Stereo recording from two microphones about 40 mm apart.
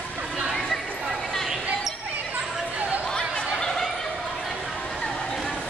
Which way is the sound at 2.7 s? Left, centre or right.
Right.